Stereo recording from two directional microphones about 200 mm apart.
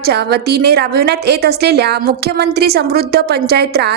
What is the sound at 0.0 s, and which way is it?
A woman's voice, 55° right (ahead or behind).